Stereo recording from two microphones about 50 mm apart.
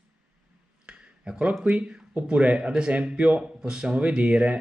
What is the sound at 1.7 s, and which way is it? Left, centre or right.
Speech, right.